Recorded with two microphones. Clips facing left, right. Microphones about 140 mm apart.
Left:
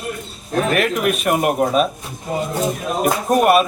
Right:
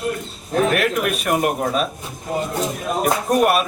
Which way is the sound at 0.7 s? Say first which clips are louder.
Left 2 dB; centre (ahead or behind).